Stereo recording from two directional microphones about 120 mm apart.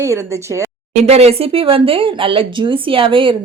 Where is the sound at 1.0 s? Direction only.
60° right (ahead or behind).